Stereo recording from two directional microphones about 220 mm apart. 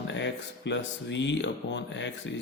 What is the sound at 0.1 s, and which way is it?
A man's voice, 55° left (ahead or behind).